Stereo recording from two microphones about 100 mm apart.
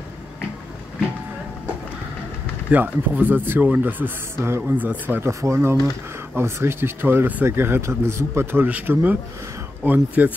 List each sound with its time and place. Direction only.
2.7 s speech: 15° right (ahead or behind)